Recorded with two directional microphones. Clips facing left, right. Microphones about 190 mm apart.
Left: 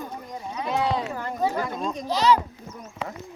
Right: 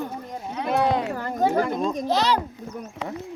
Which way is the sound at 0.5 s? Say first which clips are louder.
Right 3 dB; 55° right (ahead or behind).